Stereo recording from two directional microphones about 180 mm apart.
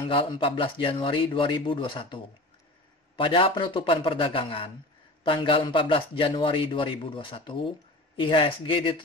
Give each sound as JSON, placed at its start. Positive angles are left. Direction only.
{"t": 0.0, "sound": "a man's voice", "side_deg": 25}